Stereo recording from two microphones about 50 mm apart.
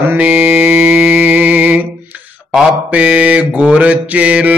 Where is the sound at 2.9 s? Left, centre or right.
Right.